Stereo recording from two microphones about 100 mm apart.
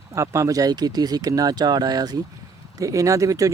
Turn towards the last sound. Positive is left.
turn(degrees=-35)  # may be behind; listen again after turning